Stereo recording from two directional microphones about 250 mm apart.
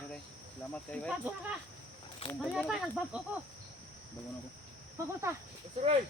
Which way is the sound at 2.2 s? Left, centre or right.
Left.